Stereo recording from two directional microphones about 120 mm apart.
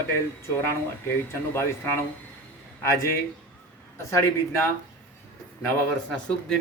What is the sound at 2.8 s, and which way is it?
Speech, 25° left (ahead or behind).